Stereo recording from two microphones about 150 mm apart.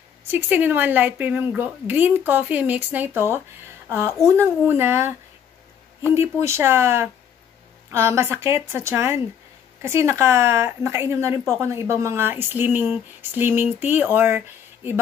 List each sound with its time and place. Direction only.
0.3 s speech: 15° right (ahead or behind)
4.4 s speech: 15° right (ahead or behind)
6.1 s a woman's voice: 20° right (ahead or behind)